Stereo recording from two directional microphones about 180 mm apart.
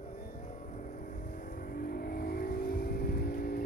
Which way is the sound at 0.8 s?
45° left (ahead or behind).